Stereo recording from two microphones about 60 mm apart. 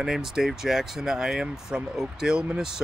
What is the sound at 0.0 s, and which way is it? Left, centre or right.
Speech, centre.